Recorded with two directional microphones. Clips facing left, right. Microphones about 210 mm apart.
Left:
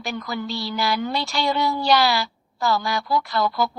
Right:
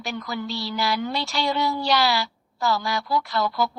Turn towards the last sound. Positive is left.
turn(degrees=50)  # may be behind; listen again after turning